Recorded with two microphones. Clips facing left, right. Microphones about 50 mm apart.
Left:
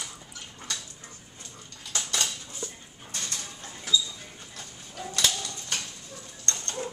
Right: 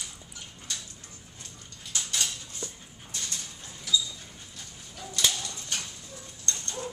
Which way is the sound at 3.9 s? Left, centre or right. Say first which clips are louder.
Left 1 dB; left.